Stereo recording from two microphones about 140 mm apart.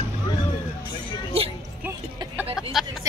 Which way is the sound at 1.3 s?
45° right (ahead or behind).